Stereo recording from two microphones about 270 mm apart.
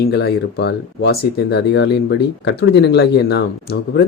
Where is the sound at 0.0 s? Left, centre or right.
Left.